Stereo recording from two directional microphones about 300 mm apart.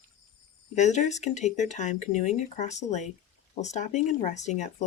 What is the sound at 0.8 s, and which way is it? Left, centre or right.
Speech, left.